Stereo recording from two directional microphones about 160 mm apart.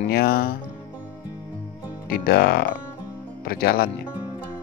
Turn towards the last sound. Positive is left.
turn(degrees=70)  # may be behind; listen again after turning